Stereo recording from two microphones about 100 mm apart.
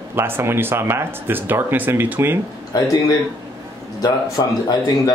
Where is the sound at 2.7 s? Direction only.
45° left (ahead or behind).